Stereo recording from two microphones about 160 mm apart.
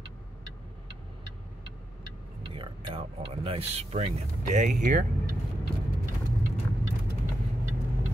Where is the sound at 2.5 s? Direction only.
35° right (ahead or behind).